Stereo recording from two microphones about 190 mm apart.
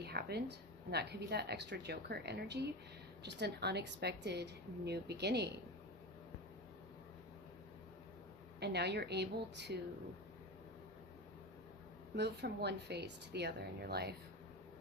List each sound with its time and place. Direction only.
0.0 s a woman's voice: 55° right (ahead or behind)
8.6 s a woman's voice: 60° right (ahead or behind)
12.1 s a woman's voice: 60° right (ahead or behind)